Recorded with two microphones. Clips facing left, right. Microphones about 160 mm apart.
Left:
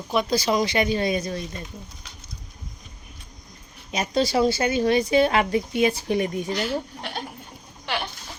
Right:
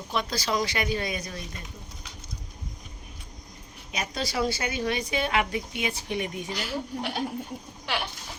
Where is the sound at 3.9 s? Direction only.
25° left (ahead or behind).